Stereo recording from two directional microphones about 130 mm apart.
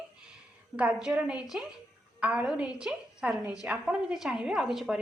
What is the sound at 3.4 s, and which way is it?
Speech, 25° left (ahead or behind).